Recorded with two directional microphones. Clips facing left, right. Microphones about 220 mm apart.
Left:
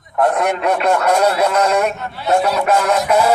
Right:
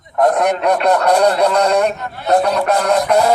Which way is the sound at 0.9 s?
35° right (ahead or behind).